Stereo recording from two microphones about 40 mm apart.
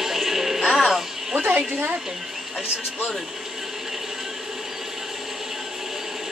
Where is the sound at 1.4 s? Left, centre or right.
Right.